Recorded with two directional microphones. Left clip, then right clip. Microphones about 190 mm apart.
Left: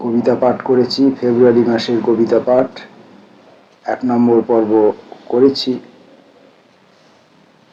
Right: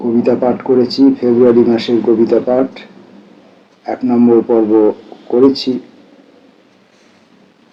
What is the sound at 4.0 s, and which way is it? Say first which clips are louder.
Speech: right 3 dB; 15° left (ahead or behind).